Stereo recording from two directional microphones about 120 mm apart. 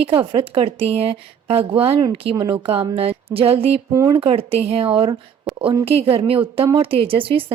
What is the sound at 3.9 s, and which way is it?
Speech, 30° right (ahead or behind).